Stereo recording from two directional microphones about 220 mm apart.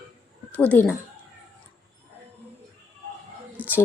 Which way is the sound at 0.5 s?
10° left (ahead or behind).